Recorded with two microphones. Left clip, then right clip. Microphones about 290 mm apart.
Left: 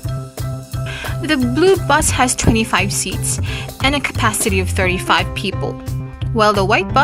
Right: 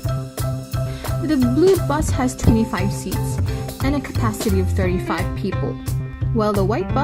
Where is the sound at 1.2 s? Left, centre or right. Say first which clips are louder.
Left 2 dB; left.